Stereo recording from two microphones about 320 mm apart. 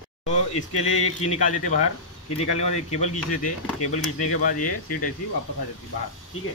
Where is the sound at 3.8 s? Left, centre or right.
Left.